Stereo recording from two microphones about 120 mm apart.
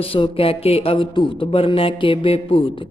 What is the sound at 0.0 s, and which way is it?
Mantra, 50° left (ahead or behind).